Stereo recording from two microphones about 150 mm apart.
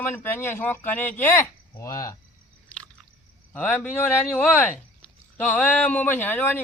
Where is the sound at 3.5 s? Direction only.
5° left (ahead or behind).